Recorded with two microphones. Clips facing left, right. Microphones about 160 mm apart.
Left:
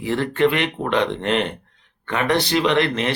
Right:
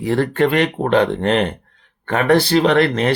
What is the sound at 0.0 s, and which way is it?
Speech, 40° right (ahead or behind).